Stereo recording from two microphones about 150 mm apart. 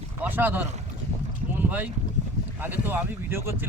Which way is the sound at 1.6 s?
10° right (ahead or behind).